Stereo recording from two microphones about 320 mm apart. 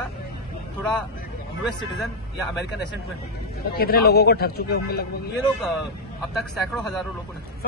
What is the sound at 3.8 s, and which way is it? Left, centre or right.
Speech, left.